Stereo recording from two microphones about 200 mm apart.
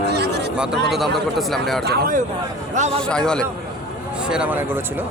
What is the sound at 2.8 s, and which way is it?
Speech, 30° right (ahead or behind).